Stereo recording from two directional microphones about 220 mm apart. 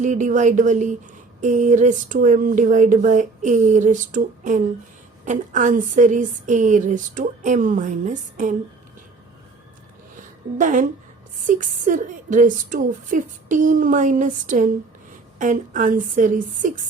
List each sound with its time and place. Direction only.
0.0 s a woman's voice: 35° right (ahead or behind)
10.6 s a woman's voice: 35° right (ahead or behind)